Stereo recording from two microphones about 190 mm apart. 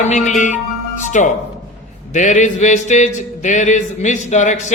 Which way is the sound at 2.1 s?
40° left (ahead or behind).